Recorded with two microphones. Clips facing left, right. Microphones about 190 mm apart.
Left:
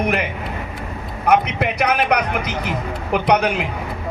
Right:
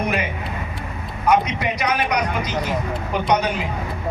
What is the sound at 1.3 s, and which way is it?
Speech, 60° left (ahead or behind).